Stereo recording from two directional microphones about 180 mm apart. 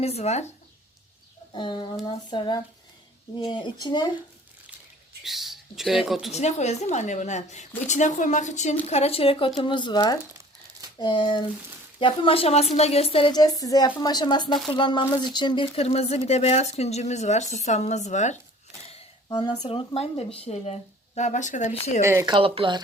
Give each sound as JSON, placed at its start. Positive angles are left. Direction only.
{"t": 0.0, "sound": "a woman's voice", "side_deg": 35}
{"t": 1.5, "sound": "speech", "side_deg": 25}
{"t": 5.2, "sound": "speech", "side_deg": 0}
{"t": 6.3, "sound": "a woman's voice", "side_deg": 40}
{"t": 18.9, "sound": "a sound", "side_deg": 30}
{"t": 19.6, "sound": "a woman's voice", "side_deg": 30}
{"t": 22.0, "sound": "speech", "side_deg": -15}
{"t": 22.3, "sound": "speech", "side_deg": -30}